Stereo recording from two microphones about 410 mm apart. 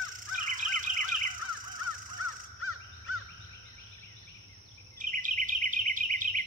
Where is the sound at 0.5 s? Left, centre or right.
Centre.